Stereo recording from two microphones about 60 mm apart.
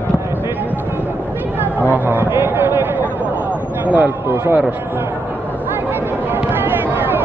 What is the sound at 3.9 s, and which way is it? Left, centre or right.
Speech, right.